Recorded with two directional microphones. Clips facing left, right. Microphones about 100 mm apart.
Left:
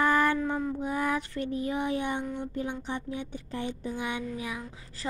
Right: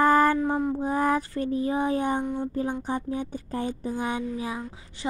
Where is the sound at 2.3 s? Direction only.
35° right (ahead or behind).